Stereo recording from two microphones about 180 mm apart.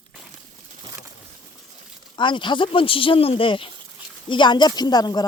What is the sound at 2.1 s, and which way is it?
Speech, 25° left (ahead or behind).